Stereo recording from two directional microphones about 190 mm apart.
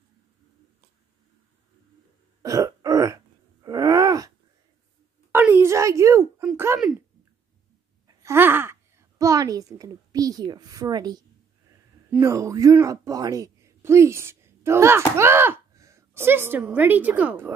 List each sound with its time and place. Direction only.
2.4 s throat clearing: 15° right (ahead or behind)
3.6 s groan: 20° right (ahead or behind)
5.3 s a sound: 10° right (ahead or behind)
8.2 s a woman's voice: 10° right (ahead or behind)